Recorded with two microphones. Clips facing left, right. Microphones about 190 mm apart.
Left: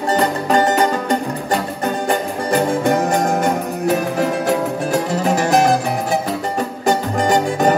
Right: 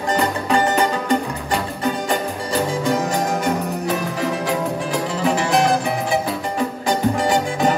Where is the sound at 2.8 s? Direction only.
55° left (ahead or behind).